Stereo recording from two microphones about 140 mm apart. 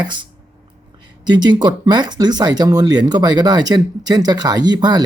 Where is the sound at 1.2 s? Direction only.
30° right (ahead or behind).